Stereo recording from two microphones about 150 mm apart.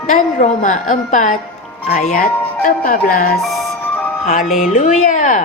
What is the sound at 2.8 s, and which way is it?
Speech, 75° left (ahead or behind).